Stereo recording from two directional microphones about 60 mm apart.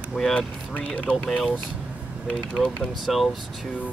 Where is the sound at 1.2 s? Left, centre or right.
Centre.